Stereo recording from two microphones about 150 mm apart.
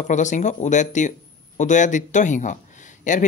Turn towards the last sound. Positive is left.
turn(degrees=55)  # may be behind; listen again after turning